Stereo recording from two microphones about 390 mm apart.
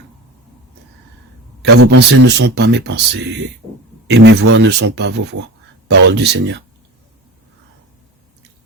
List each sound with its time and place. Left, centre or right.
1.6 s a man's voice: right